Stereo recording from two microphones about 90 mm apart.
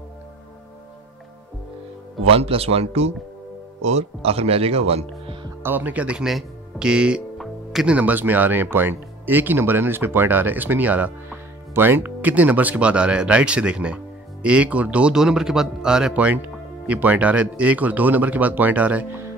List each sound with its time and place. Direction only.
2.3 s speech: 90° right
4.2 s speech: 90° right
5.6 s speech: 20° right (ahead or behind)